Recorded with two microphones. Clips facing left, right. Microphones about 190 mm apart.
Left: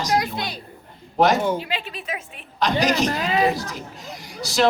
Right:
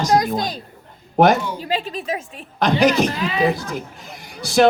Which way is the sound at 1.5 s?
40° right (ahead or behind).